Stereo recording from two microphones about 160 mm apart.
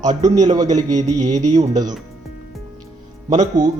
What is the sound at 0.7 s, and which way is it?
A man's voice, 45° right (ahead or behind).